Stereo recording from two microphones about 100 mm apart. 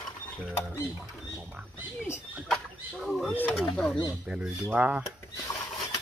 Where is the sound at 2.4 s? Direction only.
Centre (ahead or behind).